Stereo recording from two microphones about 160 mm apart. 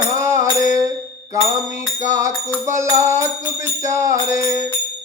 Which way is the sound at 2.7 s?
15° right (ahead or behind).